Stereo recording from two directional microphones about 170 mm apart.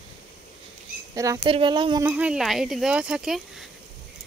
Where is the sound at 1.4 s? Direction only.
30° right (ahead or behind).